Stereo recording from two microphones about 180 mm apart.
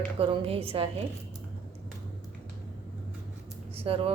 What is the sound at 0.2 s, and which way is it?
Speech, 30° right (ahead or behind).